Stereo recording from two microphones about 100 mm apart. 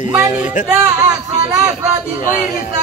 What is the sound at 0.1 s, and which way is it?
Speech, 20° right (ahead or behind).